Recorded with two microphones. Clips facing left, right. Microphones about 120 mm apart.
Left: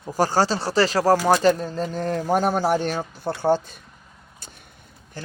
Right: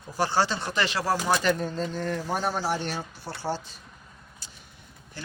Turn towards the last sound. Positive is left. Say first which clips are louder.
# left 6 dB
turn(degrees=45)  # may be behind; listen again after turning